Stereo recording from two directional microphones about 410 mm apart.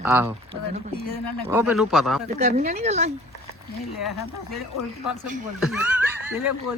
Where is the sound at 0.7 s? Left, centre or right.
Centre.